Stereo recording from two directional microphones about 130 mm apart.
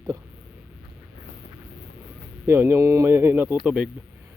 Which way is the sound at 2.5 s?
20° right (ahead or behind).